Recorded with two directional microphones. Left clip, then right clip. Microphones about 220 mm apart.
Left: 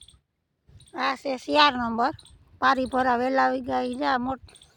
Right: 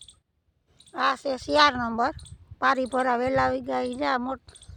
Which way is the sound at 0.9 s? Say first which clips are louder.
Right 2 dB; 10° left (ahead or behind).